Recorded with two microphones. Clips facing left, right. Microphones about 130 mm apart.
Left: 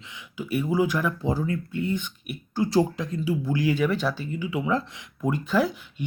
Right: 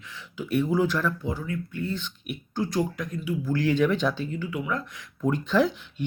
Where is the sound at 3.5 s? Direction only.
10° left (ahead or behind).